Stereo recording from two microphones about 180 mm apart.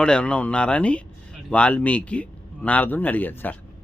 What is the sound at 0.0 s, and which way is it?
Speech, 5° left (ahead or behind).